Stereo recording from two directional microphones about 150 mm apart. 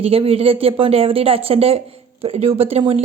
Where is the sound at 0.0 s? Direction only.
40° right (ahead or behind).